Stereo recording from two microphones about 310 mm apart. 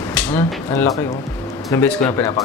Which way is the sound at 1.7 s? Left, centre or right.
Centre.